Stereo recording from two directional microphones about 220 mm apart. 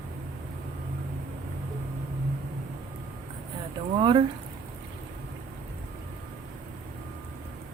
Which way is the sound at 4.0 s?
20° right (ahead or behind).